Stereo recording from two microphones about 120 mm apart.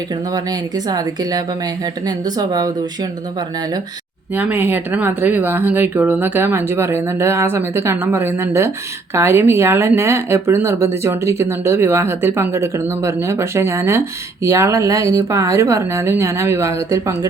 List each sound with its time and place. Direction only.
0.9 s speech: 35° right (ahead or behind)
4.4 s speech: 15° right (ahead or behind)